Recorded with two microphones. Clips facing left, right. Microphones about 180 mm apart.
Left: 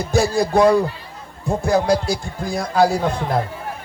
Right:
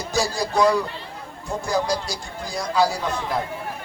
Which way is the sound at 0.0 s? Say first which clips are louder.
Left 6 dB; 55° left (ahead or behind).